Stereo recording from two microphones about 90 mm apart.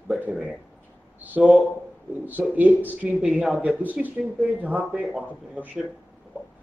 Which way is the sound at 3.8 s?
20° right (ahead or behind).